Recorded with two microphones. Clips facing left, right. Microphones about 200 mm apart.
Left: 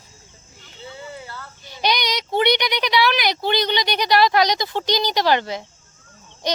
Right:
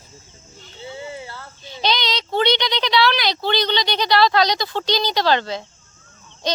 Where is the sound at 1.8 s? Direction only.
15° left (ahead or behind).